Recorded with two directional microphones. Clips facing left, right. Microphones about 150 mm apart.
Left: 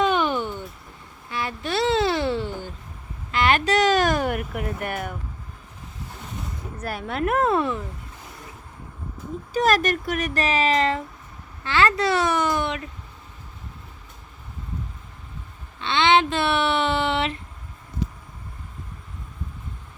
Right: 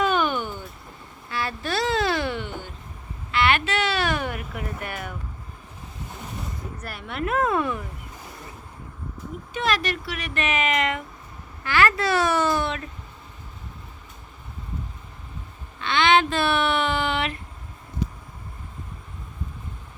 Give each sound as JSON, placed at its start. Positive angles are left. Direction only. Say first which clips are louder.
{"t": 0.0, "sound": "a sound", "louder": "left 1 dB", "side_deg": 25}
{"t": 4.3, "sound": "speech", "louder": "left 5 dB", "side_deg": 55}
{"t": 6.8, "sound": "speech", "louder": "left 5 dB", "side_deg": 45}
{"t": 7.4, "sound": "speech", "louder": "left 1 dB", "side_deg": 30}
{"t": 9.5, "sound": "speech", "louder": "left 5 dB", "side_deg": 40}
{"t": 15.8, "sound": "speech", "louder": "left 1 dB", "side_deg": 25}